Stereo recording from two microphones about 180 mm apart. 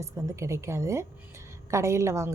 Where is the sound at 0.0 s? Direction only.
15° right (ahead or behind).